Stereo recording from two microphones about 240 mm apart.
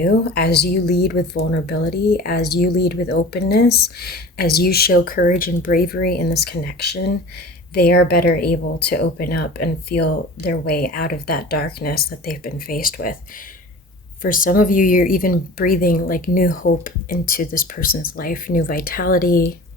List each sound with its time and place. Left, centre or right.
0.0 s speech: left
14.2 s speech: left